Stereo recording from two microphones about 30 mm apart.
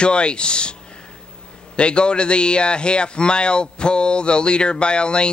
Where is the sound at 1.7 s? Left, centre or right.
Left.